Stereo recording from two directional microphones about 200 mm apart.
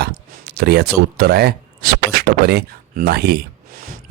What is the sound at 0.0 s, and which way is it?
Speech, 50° right (ahead or behind).